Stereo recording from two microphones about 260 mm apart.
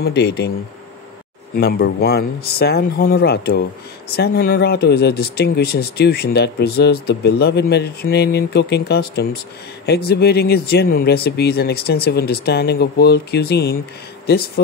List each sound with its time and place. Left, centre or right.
0.0 s speech: left
1.6 s speech: left